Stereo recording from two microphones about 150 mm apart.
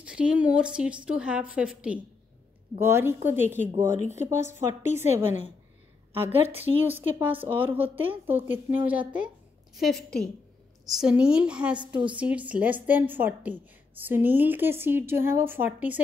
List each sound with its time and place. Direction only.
0.0 s speech: 5° right (ahead or behind)
3.9 s speech: 50° left (ahead or behind)
4.2 s speech: 15° right (ahead or behind)
9.8 s a woman's voice: centre (ahead or behind)